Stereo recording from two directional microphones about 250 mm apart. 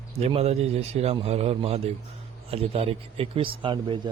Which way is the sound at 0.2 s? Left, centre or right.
Right.